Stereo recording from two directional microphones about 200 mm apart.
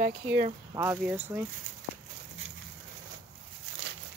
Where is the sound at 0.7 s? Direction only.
15° right (ahead or behind).